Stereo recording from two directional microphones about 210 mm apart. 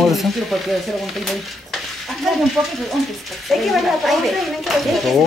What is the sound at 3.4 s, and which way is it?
Speech, centre (ahead or behind).